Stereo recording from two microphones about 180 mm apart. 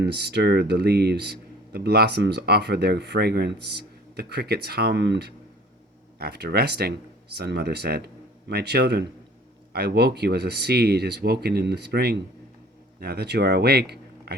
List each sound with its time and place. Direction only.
0.0 s speech: 65° right (ahead or behind)
6.1 s speech: 60° right (ahead or behind)